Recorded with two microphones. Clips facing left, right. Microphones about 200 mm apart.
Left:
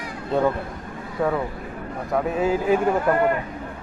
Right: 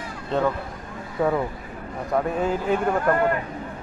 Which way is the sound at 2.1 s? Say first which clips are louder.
Left 1 dB; 5° left (ahead or behind).